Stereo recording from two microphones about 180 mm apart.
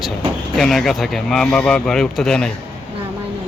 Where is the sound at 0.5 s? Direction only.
Centre (ahead or behind).